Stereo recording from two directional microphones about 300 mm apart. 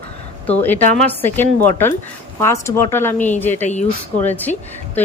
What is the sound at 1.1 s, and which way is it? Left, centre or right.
A woman's voice, centre.